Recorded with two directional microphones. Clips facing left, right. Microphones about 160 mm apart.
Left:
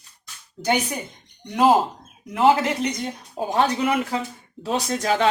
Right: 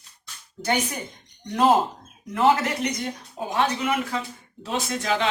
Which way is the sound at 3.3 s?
35° left (ahead or behind).